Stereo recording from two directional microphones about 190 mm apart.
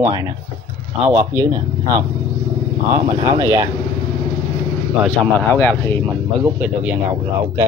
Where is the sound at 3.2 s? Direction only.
15° right (ahead or behind).